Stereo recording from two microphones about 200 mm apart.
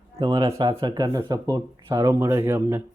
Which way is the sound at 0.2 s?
15° right (ahead or behind).